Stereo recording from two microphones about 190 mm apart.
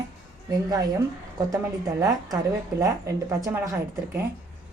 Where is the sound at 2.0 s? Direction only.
20° right (ahead or behind).